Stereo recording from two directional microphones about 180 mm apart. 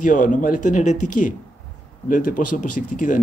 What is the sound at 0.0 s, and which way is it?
Speech, 45° left (ahead or behind).